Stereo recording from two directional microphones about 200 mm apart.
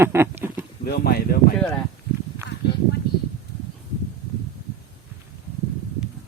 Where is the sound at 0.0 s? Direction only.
10° right (ahead or behind).